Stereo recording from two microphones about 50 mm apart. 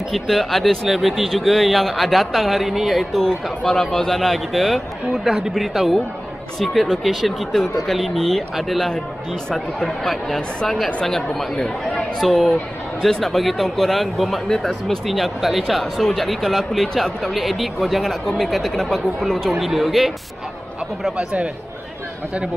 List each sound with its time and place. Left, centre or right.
0.1 s speech: centre
8.9 s speech: centre
21.2 s a man's voice: right